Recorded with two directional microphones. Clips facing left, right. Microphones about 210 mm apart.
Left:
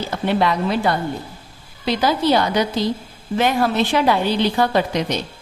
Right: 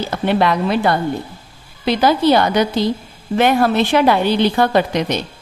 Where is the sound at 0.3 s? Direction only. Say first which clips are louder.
Right 3 dB; 65° right (ahead or behind).